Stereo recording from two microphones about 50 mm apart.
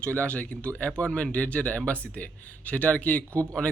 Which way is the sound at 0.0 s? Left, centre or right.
Left.